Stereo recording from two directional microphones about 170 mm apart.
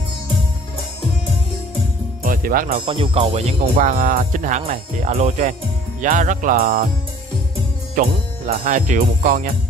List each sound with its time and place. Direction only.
2.2 s speech: 55° right (ahead or behind)
2.8 s speech: 30° right (ahead or behind); by 6.8 s 55° right (ahead or behind)
7.9 s speech: 50° right (ahead or behind)